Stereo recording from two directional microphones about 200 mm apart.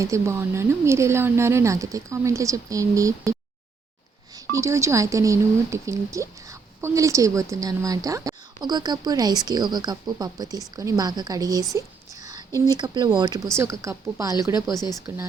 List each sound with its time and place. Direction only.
0.0 s speech: 15° right (ahead or behind)
4.5 s speech: 15° right (ahead or behind)